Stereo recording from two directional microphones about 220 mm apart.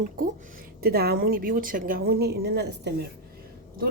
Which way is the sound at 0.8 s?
45° right (ahead or behind).